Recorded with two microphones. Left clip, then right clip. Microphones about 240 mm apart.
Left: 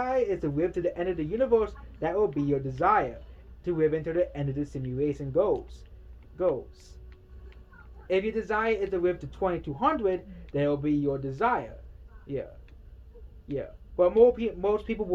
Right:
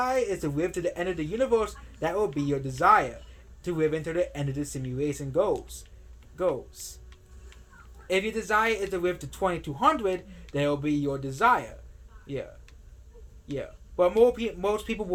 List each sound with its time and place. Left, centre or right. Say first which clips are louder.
0.0 s speech: even; centre
8.0 s speech: even; right
13.5 s speech: left 1 dB; right